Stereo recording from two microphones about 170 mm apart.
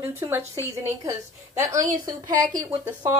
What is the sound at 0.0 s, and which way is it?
Speech, 15° right (ahead or behind).